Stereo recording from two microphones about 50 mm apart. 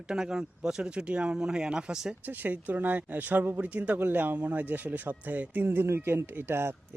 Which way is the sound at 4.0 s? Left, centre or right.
Right.